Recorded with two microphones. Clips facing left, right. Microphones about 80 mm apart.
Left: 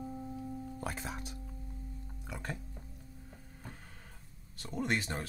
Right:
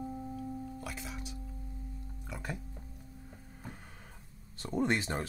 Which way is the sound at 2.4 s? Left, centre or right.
Centre.